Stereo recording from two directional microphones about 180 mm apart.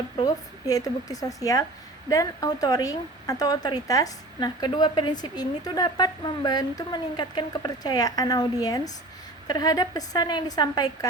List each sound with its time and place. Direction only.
0.2 s a woman's voice: 20° left (ahead or behind)